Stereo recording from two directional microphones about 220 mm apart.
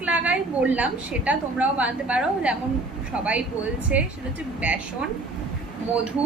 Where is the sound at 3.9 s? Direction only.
5° right (ahead or behind).